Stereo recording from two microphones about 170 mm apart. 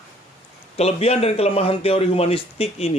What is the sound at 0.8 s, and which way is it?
A man's voice, 35° left (ahead or behind).